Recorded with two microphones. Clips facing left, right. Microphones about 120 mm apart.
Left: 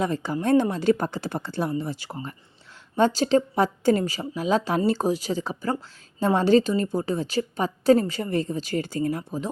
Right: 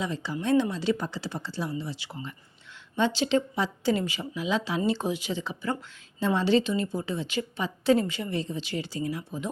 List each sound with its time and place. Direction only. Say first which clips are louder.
0.0 s a woman's voice: left 5 dB; 50° left (ahead or behind)